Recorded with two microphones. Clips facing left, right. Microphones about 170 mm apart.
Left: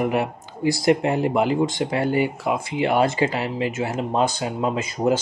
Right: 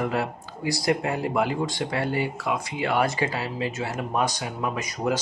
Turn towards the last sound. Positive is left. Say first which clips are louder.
# left 5 dB
turn(degrees=25)  # may be behind; listen again after turning